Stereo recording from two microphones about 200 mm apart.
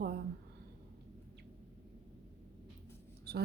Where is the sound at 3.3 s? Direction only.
50° right (ahead or behind).